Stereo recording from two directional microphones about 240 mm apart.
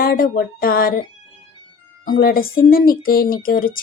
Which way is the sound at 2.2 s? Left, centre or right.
Left.